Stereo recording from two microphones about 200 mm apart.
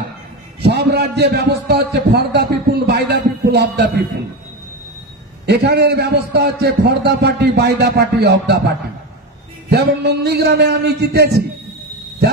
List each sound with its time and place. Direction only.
0.6 s a man's voice: 55° right (ahead or behind)
5.5 s a man's voice: 55° right (ahead or behind)
9.7 s a man's voice: 55° right (ahead or behind)